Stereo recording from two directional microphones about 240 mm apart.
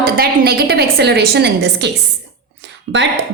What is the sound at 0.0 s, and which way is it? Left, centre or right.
A woman's voice, right.